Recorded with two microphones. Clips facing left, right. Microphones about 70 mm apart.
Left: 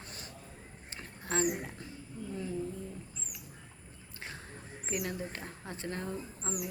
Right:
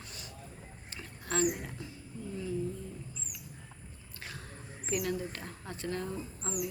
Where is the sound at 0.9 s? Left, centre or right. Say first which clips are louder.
Right 1 dB; left.